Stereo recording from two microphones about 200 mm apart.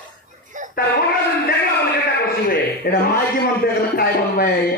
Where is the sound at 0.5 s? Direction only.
40° right (ahead or behind).